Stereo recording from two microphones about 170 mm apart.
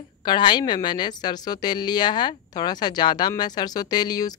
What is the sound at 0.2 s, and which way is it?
A woman's voice, 25° left (ahead or behind).